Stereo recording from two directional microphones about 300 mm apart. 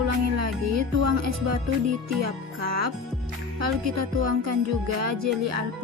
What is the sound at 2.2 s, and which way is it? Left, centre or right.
Music, right.